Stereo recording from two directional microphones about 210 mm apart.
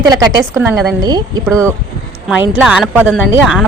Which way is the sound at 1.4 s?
15° right (ahead or behind).